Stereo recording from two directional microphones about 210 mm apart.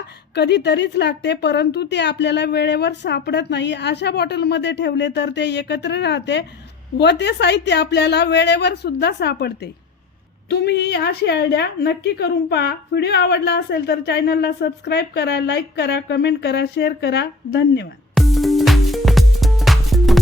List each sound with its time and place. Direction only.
0.3 s a woman's voice: 55° left (ahead or behind)
10.5 s a woman's voice: 50° left (ahead or behind)
18.1 s music: centre (ahead or behind)